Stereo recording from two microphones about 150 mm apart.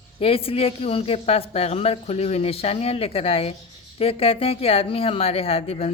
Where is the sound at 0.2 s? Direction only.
40° left (ahead or behind).